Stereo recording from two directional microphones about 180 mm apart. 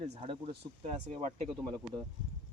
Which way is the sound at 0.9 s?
40° right (ahead or behind).